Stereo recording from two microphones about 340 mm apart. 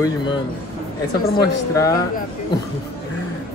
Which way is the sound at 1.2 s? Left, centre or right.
Left.